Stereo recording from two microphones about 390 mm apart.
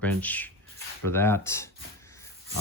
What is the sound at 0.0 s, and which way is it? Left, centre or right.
Speech, centre.